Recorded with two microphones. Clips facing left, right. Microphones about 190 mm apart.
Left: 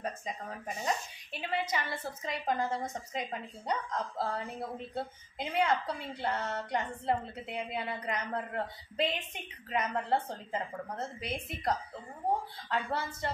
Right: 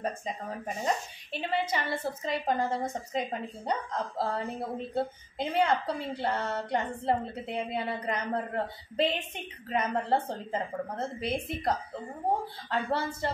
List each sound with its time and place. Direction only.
0.0 s a woman's voice: 30° right (ahead or behind)